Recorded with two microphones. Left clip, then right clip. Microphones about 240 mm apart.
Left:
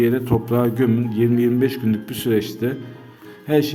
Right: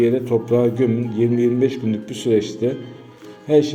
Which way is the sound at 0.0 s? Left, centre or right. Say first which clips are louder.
Right 2 dB; left.